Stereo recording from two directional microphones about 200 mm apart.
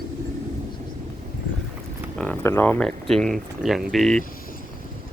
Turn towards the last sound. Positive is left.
turn(degrees=0)  # may be behind; listen again after turning